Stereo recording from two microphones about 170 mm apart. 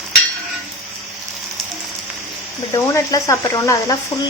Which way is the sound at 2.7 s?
15° left (ahead or behind).